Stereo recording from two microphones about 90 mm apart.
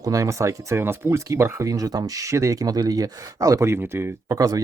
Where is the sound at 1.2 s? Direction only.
35° right (ahead or behind).